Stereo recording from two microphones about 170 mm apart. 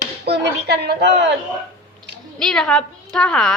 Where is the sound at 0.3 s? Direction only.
75° right (ahead or behind).